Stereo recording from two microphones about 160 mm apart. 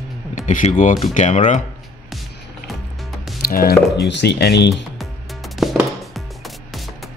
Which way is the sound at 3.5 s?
75° left (ahead or behind).